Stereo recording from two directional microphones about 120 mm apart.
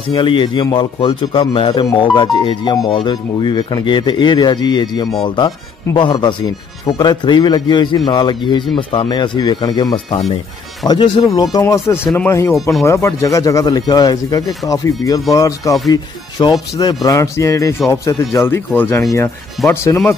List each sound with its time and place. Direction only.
0.1 s speech: 45° left (ahead or behind)
11.5 s speech: 25° left (ahead or behind)